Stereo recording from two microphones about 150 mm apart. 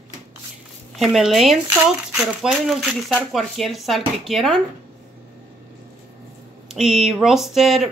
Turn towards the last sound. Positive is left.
turn(degrees=0)  # may be behind; listen again after turning